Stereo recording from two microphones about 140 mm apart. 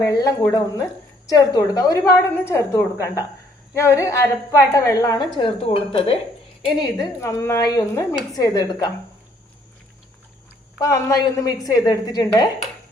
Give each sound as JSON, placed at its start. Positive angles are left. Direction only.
{"t": 0.0, "sound": "a woman's voice", "side_deg": 25}
{"t": 6.8, "sound": "a woman's voice", "side_deg": 25}
{"t": 10.8, "sound": "a woman's voice", "side_deg": 25}